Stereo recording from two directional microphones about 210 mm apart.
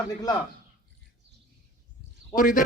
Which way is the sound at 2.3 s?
40° left (ahead or behind).